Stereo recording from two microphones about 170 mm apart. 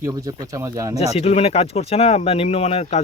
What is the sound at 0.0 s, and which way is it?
Speech, 20° right (ahead or behind).